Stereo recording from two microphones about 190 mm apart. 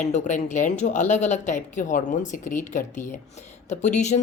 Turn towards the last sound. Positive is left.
turn(degrees=40)  # may be behind; listen again after turning